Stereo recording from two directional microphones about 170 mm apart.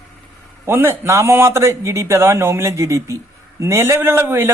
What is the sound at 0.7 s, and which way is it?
A man's voice, 15° right (ahead or behind).